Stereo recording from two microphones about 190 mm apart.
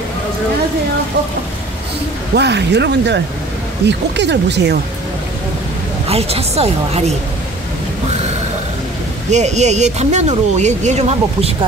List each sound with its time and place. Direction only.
2.3 s speech: 65° right (ahead or behind)
6.0 s speech: 30° right (ahead or behind)
9.3 s speech: 35° right (ahead or behind)